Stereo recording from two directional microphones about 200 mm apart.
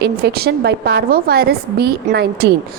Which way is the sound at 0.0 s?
55° right (ahead or behind).